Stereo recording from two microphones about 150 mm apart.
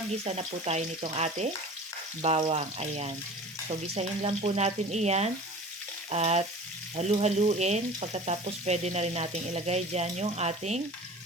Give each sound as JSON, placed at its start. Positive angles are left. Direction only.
{"t": 0.3, "sound": "frying", "side_deg": -45}
{"t": 2.5, "sound": "frying", "side_deg": -45}